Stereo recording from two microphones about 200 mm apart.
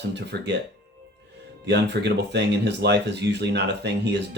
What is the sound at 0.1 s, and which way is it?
Speech, 60° right (ahead or behind).